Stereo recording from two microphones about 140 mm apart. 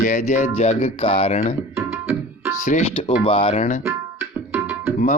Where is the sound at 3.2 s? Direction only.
40° left (ahead or behind).